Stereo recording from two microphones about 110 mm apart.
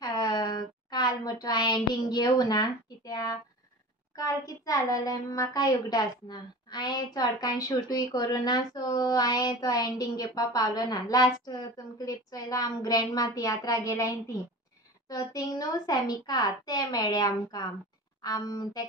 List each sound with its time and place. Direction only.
0.0 s a sound: 40° left (ahead or behind)
2.0 s a woman's voice: 40° left (ahead or behind)
4.6 s a woman's voice: 30° left (ahead or behind)